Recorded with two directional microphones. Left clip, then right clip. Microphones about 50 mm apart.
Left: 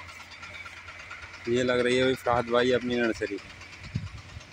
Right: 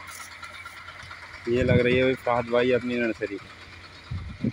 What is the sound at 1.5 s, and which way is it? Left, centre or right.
Speech, right.